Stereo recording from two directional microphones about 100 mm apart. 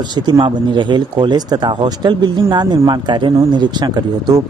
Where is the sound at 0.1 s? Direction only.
45° right (ahead or behind).